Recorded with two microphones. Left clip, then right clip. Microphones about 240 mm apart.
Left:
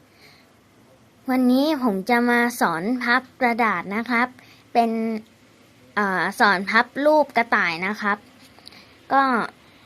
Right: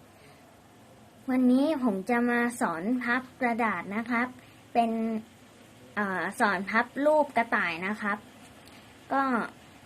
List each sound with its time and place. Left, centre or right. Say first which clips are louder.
1.3 s speech: left 5 dB; left